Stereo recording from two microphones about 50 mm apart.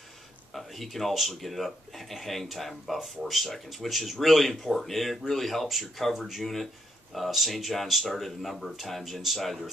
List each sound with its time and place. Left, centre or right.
0.5 s speech: centre